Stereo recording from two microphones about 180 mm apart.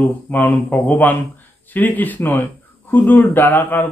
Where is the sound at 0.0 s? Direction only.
10° left (ahead or behind).